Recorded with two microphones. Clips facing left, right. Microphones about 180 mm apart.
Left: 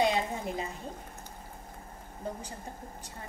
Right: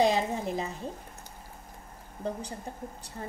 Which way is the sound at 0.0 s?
35° right (ahead or behind).